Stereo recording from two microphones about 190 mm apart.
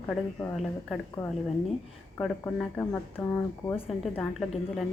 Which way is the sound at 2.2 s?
5° left (ahead or behind).